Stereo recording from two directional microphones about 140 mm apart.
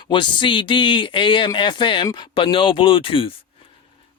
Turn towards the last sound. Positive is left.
turn(degrees=40)  # may be behind; listen again after turning